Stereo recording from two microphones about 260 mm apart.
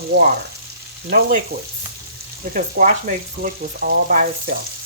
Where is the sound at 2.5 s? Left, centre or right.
Right.